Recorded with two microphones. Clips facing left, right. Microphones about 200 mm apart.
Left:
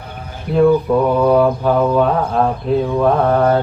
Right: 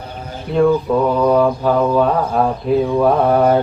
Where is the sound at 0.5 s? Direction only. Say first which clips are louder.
Left 2 dB; 5° left (ahead or behind).